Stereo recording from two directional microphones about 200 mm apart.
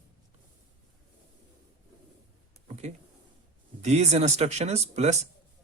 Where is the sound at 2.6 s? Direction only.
35° right (ahead or behind).